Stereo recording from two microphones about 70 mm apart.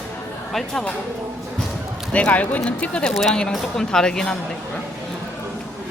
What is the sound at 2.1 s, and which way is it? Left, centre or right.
Speech, centre.